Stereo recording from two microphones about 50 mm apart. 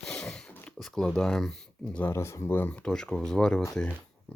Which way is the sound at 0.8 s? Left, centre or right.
Centre.